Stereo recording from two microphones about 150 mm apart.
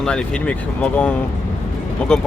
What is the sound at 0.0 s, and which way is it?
A man's voice, 5° left (ahead or behind).